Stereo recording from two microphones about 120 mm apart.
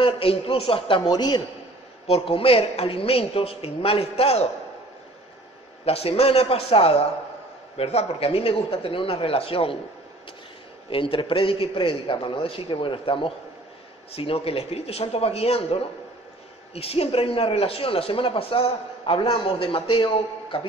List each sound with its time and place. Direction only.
0.0 s speech: 50° left (ahead or behind)
2.0 s a woman's voice: 55° left (ahead or behind)
5.9 s a woman's voice: 55° left (ahead or behind)
10.9 s a woman's voice: 50° left (ahead or behind)